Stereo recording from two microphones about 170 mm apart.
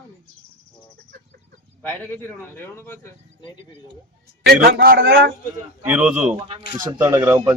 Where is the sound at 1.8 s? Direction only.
10° left (ahead or behind).